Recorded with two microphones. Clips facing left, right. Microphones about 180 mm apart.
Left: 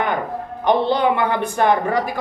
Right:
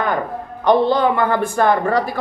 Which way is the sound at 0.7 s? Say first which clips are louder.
Right 2 dB; 20° left (ahead or behind).